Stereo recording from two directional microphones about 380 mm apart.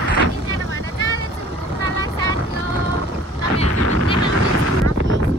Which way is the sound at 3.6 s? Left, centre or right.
Right.